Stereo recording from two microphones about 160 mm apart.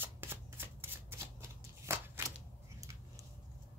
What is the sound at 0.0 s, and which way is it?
Shuffling cards, 15° right (ahead or behind).